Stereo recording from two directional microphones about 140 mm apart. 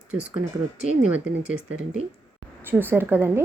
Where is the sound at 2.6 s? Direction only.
15° right (ahead or behind).